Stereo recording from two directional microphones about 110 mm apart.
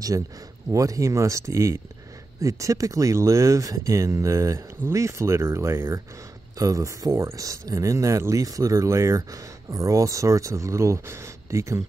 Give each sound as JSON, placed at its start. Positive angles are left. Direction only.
{"t": 0.7, "sound": "speech", "side_deg": -30}